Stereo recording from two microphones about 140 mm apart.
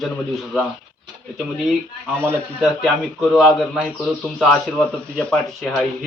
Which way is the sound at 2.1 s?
15° right (ahead or behind).